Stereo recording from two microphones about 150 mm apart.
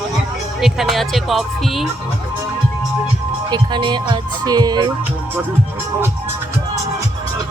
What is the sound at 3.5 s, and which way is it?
Speech, 30° right (ahead or behind).